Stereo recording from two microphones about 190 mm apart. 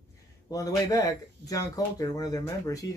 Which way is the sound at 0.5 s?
20° left (ahead or behind).